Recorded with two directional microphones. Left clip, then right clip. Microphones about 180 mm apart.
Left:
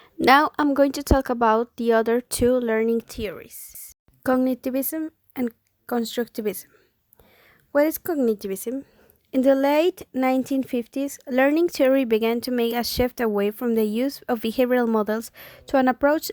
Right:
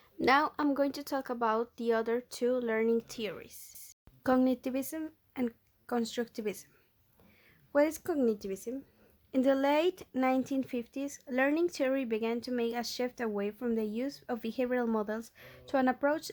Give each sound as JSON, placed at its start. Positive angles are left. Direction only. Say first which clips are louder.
{"t": 0.0, "sound": "speech", "louder": "left 10 dB", "side_deg": 40}
{"t": 7.7, "sound": "speech", "louder": "left 8 dB", "side_deg": 35}
{"t": 9.3, "sound": "speech", "louder": "left 9 dB", "side_deg": 30}